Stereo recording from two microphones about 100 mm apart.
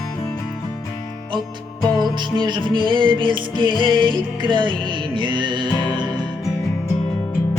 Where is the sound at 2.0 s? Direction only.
45° right (ahead or behind).